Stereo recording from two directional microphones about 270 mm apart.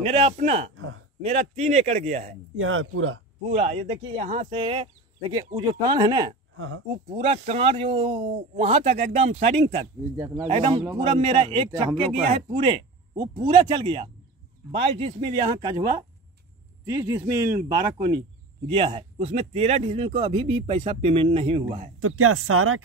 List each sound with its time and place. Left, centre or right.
0.0 s speech: right
0.7 s a sound: right
1.2 s speech: right
2.5 s speech: right
3.5 s speech: right
6.5 s speech: right
7.1 s speech: right
10.1 s speech: centre
10.4 s speech: right
17.0 s speech: centre
22.0 s speech: right